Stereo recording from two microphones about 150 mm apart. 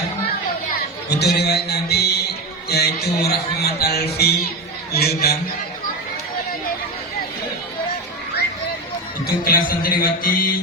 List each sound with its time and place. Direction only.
1.1 s a man's voice: 90° left
9.2 s music: 75° left (ahead or behind)